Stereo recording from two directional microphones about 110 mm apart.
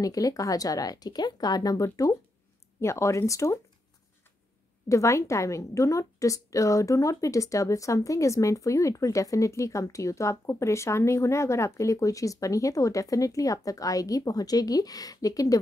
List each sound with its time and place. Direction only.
0.0 s a woman's voice: 35° left (ahead or behind)
4.8 s a woman's voice: 30° left (ahead or behind)